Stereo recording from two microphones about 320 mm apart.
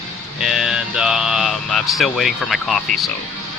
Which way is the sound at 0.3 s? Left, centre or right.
Centre.